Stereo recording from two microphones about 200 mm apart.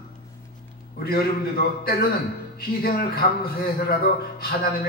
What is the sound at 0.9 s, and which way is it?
A man's voice, 50° left (ahead or behind).